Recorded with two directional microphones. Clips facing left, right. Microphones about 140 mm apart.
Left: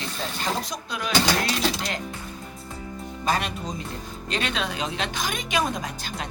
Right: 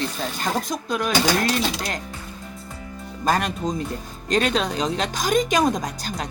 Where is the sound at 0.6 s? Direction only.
50° right (ahead or behind).